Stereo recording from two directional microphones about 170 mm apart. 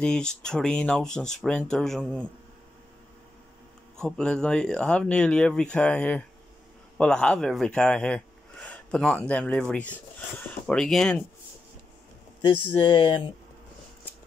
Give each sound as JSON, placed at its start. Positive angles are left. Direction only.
{"t": 0.0, "sound": "speech", "side_deg": 5}
{"t": 4.0, "sound": "speech", "side_deg": 5}
{"t": 12.4, "sound": "speech", "side_deg": 30}